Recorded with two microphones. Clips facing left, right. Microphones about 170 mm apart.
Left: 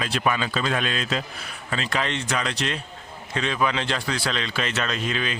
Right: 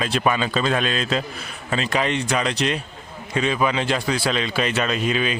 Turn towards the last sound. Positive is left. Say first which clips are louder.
# right 5 dB
turn(degrees=-10)  # may be behind; listen again after turning